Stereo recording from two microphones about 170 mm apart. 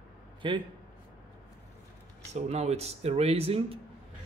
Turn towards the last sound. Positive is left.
turn(degrees=-35)  # may be behind; listen again after turning